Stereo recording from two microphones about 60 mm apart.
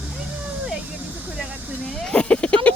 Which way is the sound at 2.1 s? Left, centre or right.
Centre.